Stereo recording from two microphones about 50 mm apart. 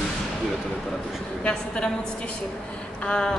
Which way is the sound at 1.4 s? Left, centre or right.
Centre.